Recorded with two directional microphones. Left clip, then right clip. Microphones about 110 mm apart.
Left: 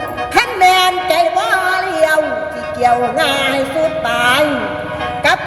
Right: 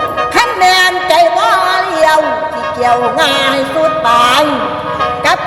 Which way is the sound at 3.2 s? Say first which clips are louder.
Right 3 dB; 20° right (ahead or behind).